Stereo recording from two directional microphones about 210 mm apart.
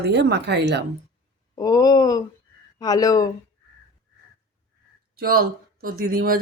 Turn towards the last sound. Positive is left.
turn(degrees=-45)  # may be behind; listen again after turning